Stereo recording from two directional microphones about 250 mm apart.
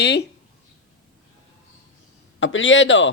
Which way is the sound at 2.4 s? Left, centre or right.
Left.